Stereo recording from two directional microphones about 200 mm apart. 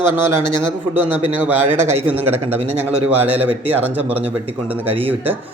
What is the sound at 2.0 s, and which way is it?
Speech, 10° right (ahead or behind).